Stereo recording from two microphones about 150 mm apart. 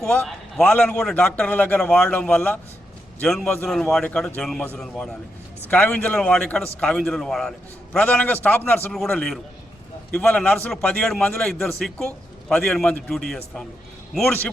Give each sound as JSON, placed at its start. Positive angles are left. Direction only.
{"t": 0.0, "sound": "a man's voice", "side_deg": 5}